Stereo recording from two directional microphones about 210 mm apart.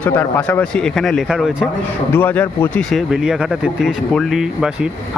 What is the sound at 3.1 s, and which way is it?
Speech, 5° right (ahead or behind).